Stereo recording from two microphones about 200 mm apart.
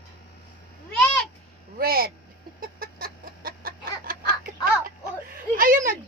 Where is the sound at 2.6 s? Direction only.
45° right (ahead or behind).